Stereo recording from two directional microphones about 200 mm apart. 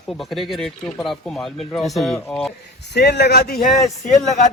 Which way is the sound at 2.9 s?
55° left (ahead or behind).